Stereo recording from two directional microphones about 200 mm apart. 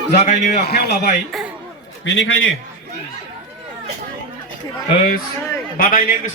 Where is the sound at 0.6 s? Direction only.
50° left (ahead or behind).